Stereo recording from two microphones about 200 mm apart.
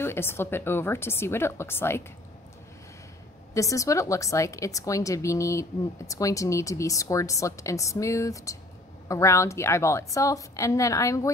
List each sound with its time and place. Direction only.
0.0 s a woman's voice: 10° left (ahead or behind)
3.5 s a woman's voice: 15° left (ahead or behind)